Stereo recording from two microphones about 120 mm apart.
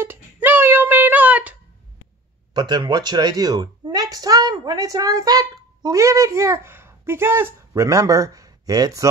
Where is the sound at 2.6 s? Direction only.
40° right (ahead or behind).